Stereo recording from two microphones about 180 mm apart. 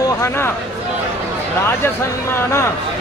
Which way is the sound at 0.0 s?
15° left (ahead or behind).